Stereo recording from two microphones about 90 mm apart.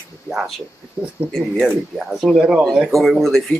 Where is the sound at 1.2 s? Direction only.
15° right (ahead or behind).